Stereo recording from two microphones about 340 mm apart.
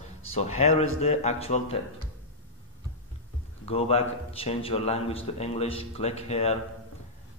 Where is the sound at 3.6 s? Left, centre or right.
Centre.